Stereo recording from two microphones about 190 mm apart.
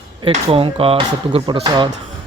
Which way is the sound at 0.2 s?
30° right (ahead or behind).